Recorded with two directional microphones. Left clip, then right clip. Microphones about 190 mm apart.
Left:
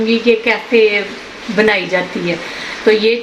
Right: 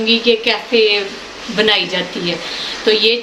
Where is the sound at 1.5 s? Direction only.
20° left (ahead or behind).